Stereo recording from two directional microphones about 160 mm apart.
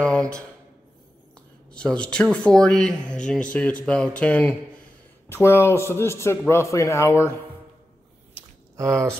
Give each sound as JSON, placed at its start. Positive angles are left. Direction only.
{"t": 0.0, "sound": "a sound", "side_deg": 5}
{"t": 1.7, "sound": "a man's voice", "side_deg": 5}
{"t": 8.7, "sound": "speech", "side_deg": -20}